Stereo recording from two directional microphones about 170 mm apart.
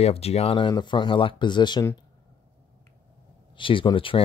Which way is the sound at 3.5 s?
30° left (ahead or behind).